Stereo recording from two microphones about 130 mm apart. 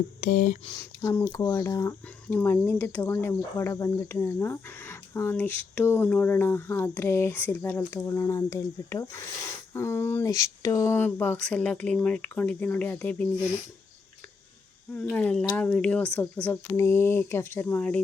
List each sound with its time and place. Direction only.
0.2 s speech: 85° left
0.8 s speech: 20° left (ahead or behind)
1.3 s speech: 35° left (ahead or behind)
2.2 s speech: 15° left (ahead or behind)
15.1 s speech: 10° left (ahead or behind)